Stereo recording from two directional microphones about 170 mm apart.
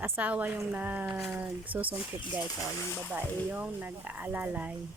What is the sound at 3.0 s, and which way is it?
Speech, 5° right (ahead or behind).